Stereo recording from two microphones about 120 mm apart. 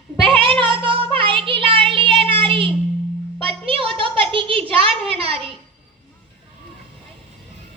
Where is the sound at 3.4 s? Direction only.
50° right (ahead or behind).